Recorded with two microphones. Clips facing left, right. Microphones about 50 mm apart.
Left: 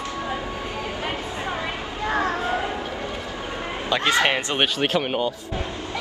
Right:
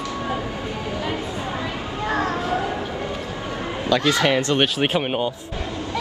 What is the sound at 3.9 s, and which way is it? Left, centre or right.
Speech, left.